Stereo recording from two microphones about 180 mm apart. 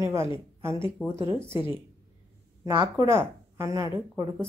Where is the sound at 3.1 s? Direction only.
15° right (ahead or behind).